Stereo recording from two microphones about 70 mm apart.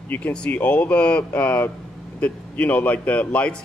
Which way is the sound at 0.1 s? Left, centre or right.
Centre.